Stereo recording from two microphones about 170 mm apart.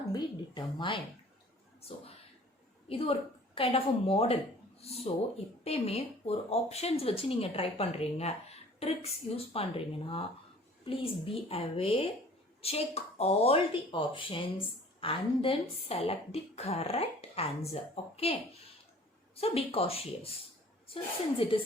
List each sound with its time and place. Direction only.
0.1 s speech: 25° left (ahead or behind)
2.9 s a woman's voice: 35° left (ahead or behind)
19.4 s a woman's voice: 35° left (ahead or behind)